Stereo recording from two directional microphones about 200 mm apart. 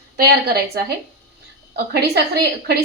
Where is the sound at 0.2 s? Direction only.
50° right (ahead or behind).